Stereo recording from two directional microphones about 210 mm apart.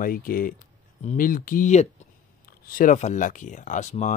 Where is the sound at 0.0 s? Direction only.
40° left (ahead or behind).